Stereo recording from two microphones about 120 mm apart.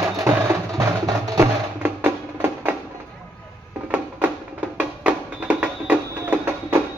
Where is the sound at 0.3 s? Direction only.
20° right (ahead or behind).